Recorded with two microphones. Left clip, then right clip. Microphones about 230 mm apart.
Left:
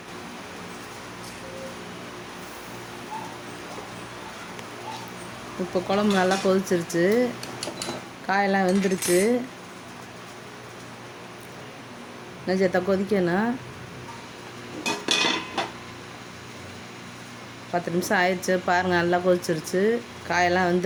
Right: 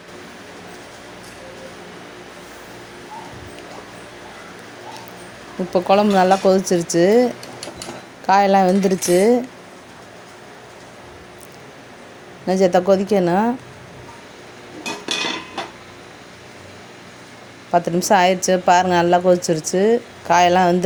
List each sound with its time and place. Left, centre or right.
5.7 s speech: right
7.4 s a sound: centre
8.3 s speech: right
8.7 s speech: centre
12.5 s speech: right
14.8 s dishes: centre
17.7 s speech: right